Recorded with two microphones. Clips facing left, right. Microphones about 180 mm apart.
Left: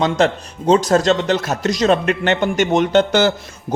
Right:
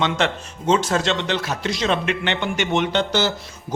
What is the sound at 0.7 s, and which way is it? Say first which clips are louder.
A man's voice: left 6 dB; 40° left (ahead or behind).